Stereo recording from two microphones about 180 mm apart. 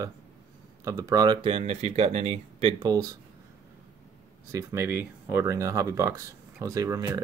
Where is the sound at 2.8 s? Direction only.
20° right (ahead or behind).